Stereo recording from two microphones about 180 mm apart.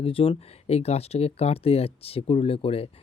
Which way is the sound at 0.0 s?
30° left (ahead or behind).